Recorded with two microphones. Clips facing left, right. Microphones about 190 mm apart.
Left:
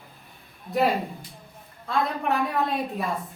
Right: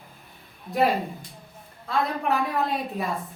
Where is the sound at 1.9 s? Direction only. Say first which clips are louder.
Even; centre (ahead or behind).